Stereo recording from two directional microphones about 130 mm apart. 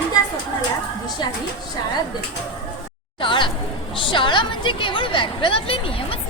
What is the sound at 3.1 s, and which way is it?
A woman's voice, 40° left (ahead or behind).